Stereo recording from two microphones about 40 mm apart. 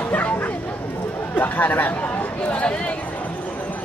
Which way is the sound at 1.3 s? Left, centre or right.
Left.